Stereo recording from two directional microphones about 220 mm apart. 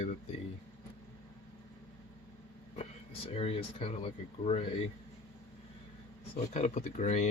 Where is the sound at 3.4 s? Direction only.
25° left (ahead or behind).